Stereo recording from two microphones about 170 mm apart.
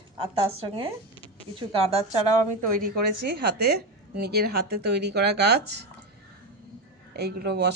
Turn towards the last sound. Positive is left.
turn(degrees=-70)  # may be behind; listen again after turning